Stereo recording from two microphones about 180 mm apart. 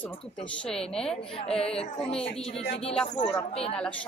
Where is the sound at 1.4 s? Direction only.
35° left (ahead or behind).